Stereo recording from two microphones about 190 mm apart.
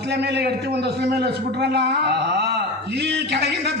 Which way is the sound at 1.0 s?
60° right (ahead or behind).